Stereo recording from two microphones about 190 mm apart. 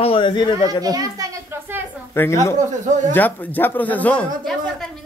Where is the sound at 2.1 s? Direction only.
15° left (ahead or behind).